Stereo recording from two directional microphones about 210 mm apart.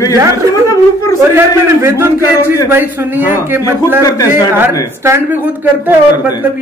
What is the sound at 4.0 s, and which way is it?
Speech, 15° left (ahead or behind).